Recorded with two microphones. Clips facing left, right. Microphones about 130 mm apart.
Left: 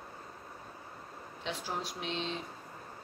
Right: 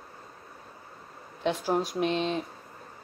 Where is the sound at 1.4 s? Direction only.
55° right (ahead or behind).